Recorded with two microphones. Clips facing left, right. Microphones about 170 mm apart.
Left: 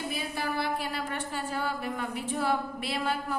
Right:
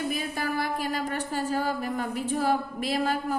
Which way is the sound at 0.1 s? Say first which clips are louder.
Right 3 dB; 45° right (ahead or behind).